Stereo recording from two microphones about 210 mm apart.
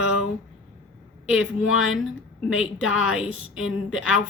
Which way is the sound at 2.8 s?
80° left.